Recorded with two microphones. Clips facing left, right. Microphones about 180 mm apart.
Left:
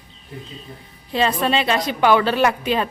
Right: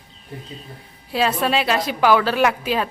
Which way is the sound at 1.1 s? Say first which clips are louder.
Left 1 dB; 5° right (ahead or behind).